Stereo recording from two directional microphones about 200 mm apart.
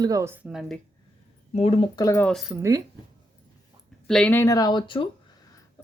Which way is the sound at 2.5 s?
15° right (ahead or behind).